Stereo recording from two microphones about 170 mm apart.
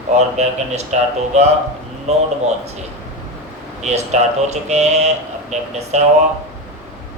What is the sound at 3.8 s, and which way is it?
Speech, 40° right (ahead or behind).